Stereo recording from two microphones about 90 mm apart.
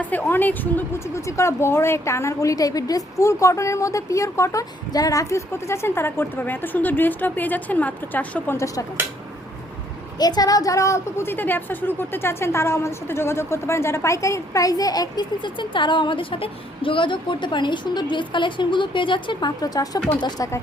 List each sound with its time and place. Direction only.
0.0 s a woman's voice: 20° left (ahead or behind)
8.5 s speech: 40° left (ahead or behind)
10.2 s a woman's voice: 45° left (ahead or behind)